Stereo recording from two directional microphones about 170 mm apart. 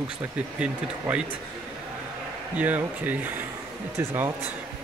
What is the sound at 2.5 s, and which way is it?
Speech, 10° right (ahead or behind).